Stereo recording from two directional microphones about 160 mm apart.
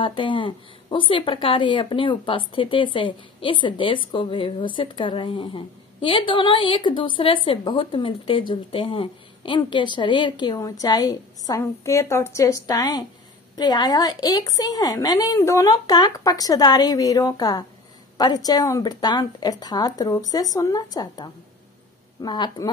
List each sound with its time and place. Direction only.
0.0 s a woman's voice: 30° left (ahead or behind)